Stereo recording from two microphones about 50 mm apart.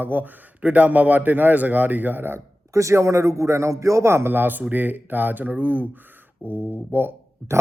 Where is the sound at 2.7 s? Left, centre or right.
Right.